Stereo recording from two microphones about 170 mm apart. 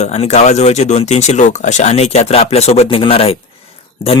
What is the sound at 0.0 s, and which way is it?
Speech, 40° left (ahead or behind).